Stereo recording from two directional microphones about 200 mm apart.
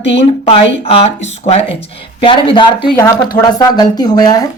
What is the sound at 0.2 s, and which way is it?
Speech, 30° left (ahead or behind).